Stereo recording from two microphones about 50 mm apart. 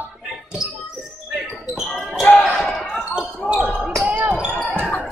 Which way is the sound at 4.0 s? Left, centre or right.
Right.